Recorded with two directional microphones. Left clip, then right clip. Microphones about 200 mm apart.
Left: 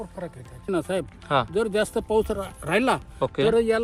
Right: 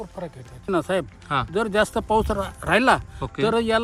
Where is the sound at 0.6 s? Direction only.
10° right (ahead or behind).